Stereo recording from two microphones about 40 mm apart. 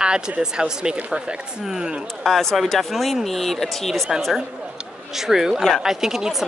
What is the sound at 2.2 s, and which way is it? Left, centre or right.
Speech, centre.